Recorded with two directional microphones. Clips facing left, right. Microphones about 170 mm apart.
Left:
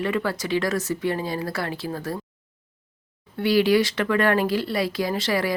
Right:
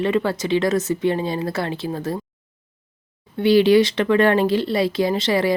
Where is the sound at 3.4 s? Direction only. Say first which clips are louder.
Right 5 dB; 25° right (ahead or behind).